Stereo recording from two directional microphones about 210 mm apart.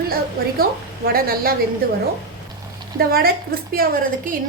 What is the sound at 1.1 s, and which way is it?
Speech, 45° right (ahead or behind).